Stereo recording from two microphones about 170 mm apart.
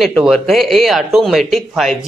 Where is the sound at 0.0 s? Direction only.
Centre (ahead or behind).